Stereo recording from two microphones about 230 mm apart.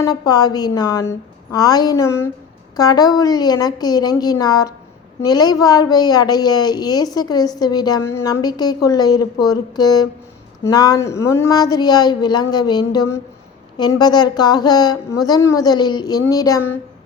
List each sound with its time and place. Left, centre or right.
0.0 s a woman's voice: centre